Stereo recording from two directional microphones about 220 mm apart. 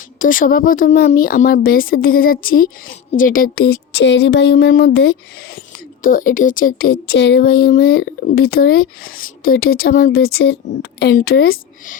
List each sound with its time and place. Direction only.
0.2 s speech: 35° left (ahead or behind)